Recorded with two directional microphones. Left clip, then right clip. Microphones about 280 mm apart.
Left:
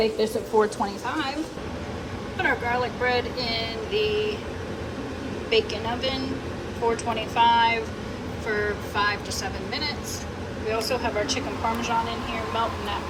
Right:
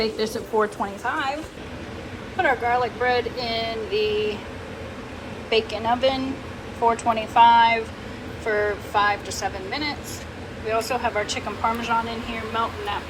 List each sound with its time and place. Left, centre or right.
0.0 s speech: centre
2.4 s speech: centre
5.5 s speech: centre